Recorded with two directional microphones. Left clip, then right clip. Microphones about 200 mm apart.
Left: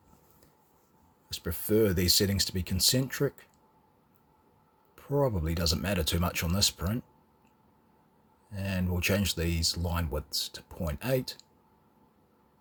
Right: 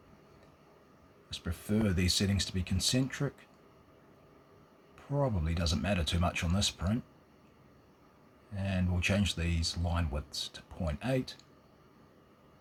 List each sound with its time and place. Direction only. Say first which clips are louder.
1.3 s speech: left 8 dB; 45° left (ahead or behind)
4.9 s speech: left 5 dB; 45° left (ahead or behind)
8.5 s speech: left 2 dB; 45° left (ahead or behind)